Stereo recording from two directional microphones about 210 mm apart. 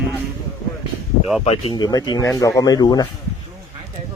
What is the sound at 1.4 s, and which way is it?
Speech, 30° left (ahead or behind).